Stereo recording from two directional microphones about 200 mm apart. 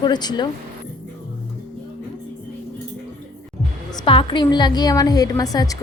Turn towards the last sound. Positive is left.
turn(degrees=15)  # may be behind; listen again after turning